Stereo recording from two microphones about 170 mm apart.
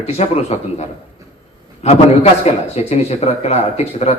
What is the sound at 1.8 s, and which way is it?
A man's voice, 40° left (ahead or behind).